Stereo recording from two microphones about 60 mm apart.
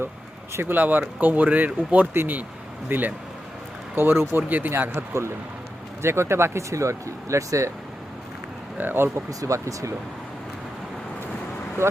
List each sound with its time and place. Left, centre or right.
0.5 s speech: right
4.7 s speech: right
8.8 s speech: right
9.1 s speech: right